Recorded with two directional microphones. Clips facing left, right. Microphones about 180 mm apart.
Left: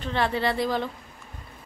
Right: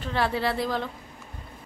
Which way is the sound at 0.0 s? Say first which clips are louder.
Left 1 dB; 5° right (ahead or behind).